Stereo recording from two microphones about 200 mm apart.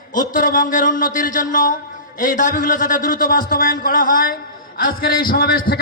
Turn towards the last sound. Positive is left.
turn(degrees=50)  # may be behind; listen again after turning